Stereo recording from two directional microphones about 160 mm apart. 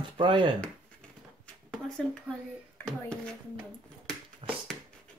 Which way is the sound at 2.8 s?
15° left (ahead or behind).